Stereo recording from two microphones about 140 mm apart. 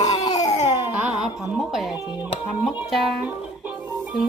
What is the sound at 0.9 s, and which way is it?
Speech, 10° right (ahead or behind).